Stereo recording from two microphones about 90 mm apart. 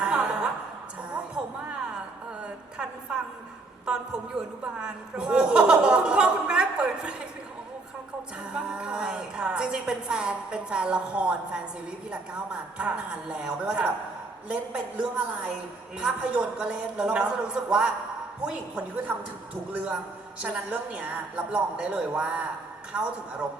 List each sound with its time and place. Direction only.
0.0 s a sound: 10° right (ahead or behind)
3.8 s a man's voice: 10° right (ahead or behind)
8.5 s a woman's voice: 15° right (ahead or behind)